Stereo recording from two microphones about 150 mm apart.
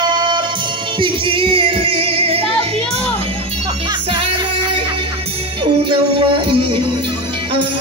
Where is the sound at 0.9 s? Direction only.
35° right (ahead or behind).